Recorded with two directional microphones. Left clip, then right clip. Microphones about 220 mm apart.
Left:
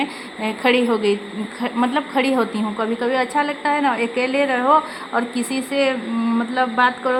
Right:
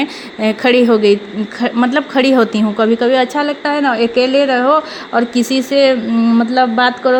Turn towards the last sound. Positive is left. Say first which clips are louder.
# right 5 dB
turn(degrees=-25)  # may be behind; listen again after turning